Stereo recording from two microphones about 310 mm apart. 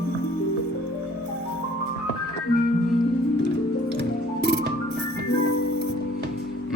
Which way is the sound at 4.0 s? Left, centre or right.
Right.